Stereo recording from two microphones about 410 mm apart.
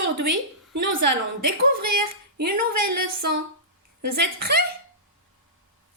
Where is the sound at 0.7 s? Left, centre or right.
Right.